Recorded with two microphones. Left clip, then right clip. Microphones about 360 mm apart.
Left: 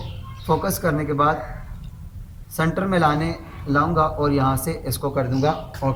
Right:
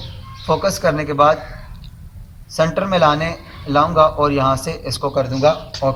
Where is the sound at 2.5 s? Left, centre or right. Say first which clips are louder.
Right 6 dB; centre.